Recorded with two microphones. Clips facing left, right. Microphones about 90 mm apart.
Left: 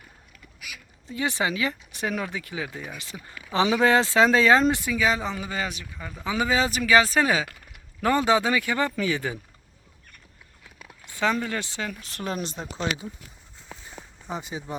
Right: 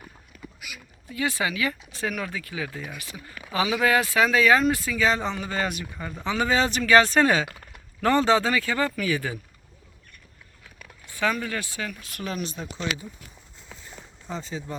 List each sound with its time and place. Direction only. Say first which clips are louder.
1.0 s speech: left 1 dB; 25° left (ahead or behind)
5.0 s speech: right 2 dB; 5° left (ahead or behind); by 9.4 s 20° left (ahead or behind)
10.8 s speech: even; 20° left (ahead or behind)
13.7 s walk: left 3 dB; 5° left (ahead or behind)
14.3 s speech: even; 15° left (ahead or behind)